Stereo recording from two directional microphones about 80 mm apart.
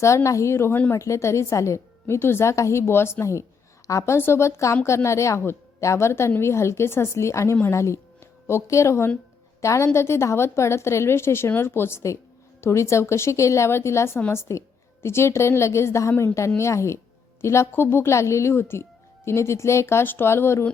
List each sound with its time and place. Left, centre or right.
0.0 s speech: left